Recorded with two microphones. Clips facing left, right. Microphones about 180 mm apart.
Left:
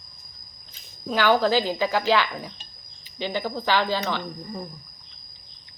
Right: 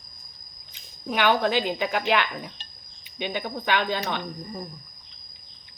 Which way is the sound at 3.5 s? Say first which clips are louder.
Left 1 dB; 90° left.